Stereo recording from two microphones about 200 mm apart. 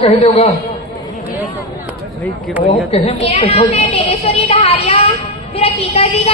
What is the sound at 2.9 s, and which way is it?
A woman's voice, 30° left (ahead or behind).